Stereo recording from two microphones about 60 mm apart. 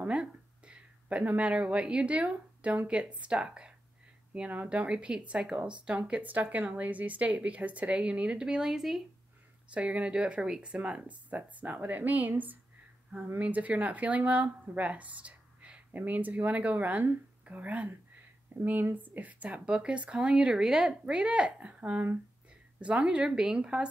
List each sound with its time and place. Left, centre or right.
0.0 s speech: centre
6.2 s speech: right; by 9.0 s centre
9.7 s speech: right
10.7 s speech: right